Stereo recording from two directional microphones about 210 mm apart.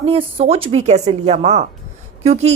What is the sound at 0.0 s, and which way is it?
A woman's voice, 30° right (ahead or behind).